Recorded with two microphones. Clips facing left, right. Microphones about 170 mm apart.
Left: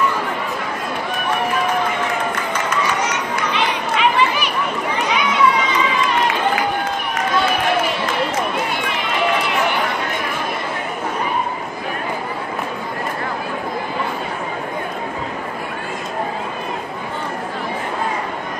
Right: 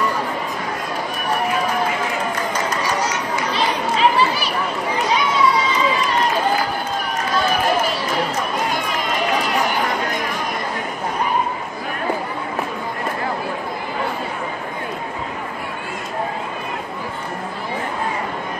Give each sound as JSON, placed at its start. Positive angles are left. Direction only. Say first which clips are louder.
{"t": 2.5, "sound": "chatter", "louder": "left 1 dB", "side_deg": -35}
{"t": 4.9, "sound": "a sound", "louder": "right 1 dB", "side_deg": -35}
{"t": 8.6, "sound": "run", "louder": "right 1 dB", "side_deg": -40}